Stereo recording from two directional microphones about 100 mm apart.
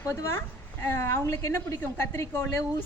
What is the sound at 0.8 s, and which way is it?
A woman's voice, 25° left (ahead or behind).